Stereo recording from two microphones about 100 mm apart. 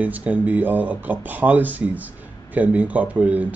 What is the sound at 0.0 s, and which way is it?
Speech, 15° right (ahead or behind).